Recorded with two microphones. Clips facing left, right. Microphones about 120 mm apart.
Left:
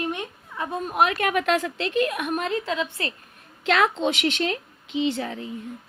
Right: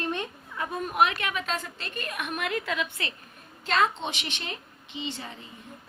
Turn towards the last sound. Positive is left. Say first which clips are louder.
# left 11 dB
turn(degrees=90)